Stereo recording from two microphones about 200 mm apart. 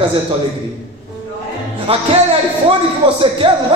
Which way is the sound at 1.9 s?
30° right (ahead or behind).